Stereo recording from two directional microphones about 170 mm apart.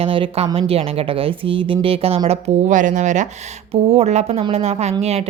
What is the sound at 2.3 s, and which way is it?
Speech, 45° right (ahead or behind).